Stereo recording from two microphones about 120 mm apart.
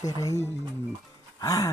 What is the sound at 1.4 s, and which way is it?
Speech, 30° left (ahead or behind).